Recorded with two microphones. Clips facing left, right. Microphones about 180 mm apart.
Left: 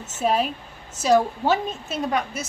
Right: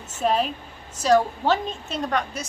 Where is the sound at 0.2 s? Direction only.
5° left (ahead or behind).